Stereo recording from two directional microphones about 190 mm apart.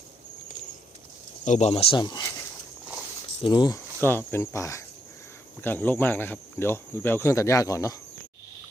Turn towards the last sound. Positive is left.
turn(degrees=15)  # may be behind; listen again after turning